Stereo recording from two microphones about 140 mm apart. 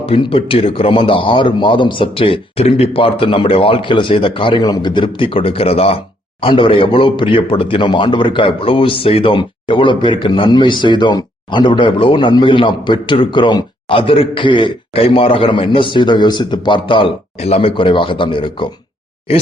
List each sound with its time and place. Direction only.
0.0 s a man's voice: 40° left (ahead or behind)